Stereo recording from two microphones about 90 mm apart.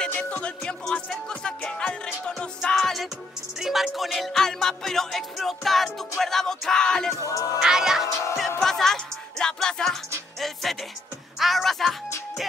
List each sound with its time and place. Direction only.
0.1 s music: 15° left (ahead or behind)
7.2 s speech: 40° left (ahead or behind)
7.6 s music: 5° right (ahead or behind)
8.5 s music: 5° left (ahead or behind)